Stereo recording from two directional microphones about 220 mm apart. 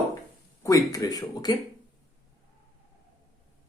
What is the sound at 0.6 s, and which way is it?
Speech, 15° left (ahead or behind).